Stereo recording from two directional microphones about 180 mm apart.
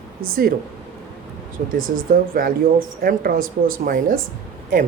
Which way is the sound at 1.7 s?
50° right (ahead or behind).